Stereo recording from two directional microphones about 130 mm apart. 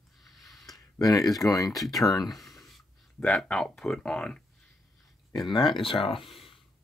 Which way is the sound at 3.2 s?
10° left (ahead or behind).